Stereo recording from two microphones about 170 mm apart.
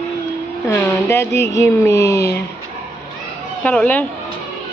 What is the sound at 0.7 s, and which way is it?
Speech, 15° left (ahead or behind).